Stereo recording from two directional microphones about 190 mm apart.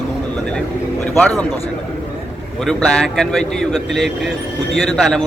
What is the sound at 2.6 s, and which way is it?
Speech, centre (ahead or behind).